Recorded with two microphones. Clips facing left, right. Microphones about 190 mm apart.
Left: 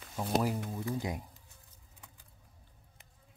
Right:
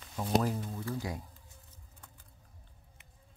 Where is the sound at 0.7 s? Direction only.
15° left (ahead or behind).